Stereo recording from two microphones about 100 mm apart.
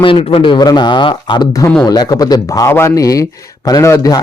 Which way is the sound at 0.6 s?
45° left (ahead or behind).